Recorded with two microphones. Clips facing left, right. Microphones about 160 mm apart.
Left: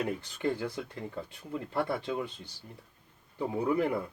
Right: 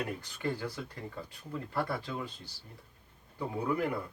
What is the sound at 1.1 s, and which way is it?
Speech, 20° left (ahead or behind).